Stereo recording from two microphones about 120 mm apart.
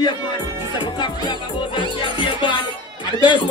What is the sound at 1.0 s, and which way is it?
Music, 40° left (ahead or behind).